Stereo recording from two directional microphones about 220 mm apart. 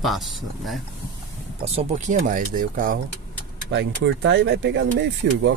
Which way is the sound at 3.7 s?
55° right (ahead or behind).